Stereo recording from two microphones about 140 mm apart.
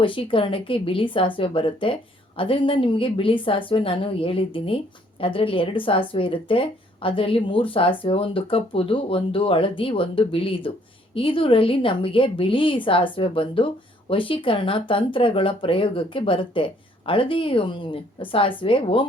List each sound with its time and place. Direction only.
0.0 s speech: 40° left (ahead or behind)